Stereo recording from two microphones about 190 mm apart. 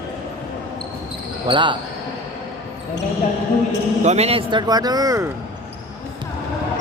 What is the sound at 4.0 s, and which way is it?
Speech, 35° right (ahead or behind).